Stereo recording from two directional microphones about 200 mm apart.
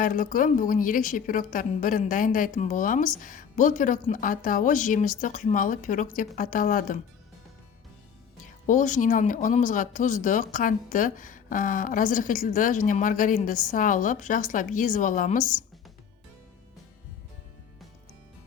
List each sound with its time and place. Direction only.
0.0 s speech: 45° left (ahead or behind)
8.4 s speech: 40° left (ahead or behind)